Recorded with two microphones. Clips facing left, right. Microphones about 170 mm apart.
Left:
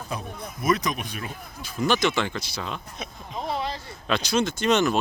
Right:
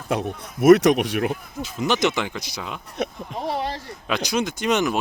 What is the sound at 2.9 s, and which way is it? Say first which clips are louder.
Speech: right 10 dB; 65° right (ahead or behind).